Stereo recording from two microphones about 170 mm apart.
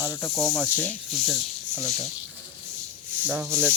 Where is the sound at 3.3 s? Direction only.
10° right (ahead or behind).